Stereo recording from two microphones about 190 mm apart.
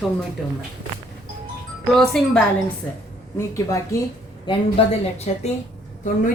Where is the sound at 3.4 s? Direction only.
15° left (ahead or behind).